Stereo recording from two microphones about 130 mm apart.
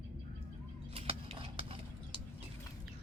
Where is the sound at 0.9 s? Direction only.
50° right (ahead or behind).